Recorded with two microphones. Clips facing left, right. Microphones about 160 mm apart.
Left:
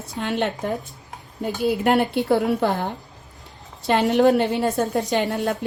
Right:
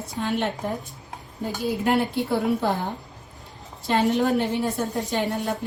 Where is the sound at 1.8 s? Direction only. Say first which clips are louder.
Left 2 dB; 65° left (ahead or behind).